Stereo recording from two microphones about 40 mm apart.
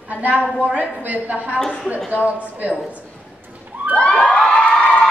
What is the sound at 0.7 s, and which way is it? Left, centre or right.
Speech, right.